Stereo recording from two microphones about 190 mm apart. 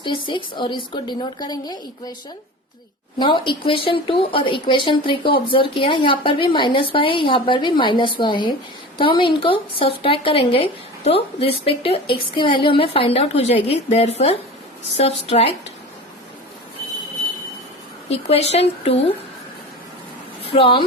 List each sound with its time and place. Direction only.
0.0 s speech: 25° left (ahead or behind)
3.2 s a woman's voice: 25° left (ahead or behind)
18.1 s a woman's voice: 30° left (ahead or behind)
20.4 s speech: 30° left (ahead or behind)